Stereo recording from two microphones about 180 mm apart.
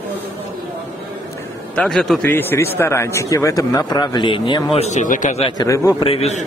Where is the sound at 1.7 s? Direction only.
5° left (ahead or behind); by 4.8 s 25° left (ahead or behind).